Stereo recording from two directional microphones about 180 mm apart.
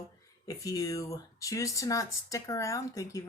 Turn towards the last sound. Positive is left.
turn(degrees=15)  # may be behind; listen again after turning